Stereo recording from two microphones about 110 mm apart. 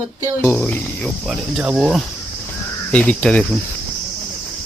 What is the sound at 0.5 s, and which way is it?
Speech, 10° left (ahead or behind).